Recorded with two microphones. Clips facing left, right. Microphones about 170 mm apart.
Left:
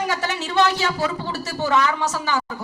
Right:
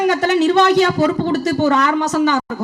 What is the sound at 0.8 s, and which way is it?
Speech, 45° right (ahead or behind).